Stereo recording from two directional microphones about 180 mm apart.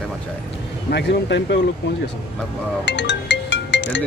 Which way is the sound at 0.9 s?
70° left (ahead or behind).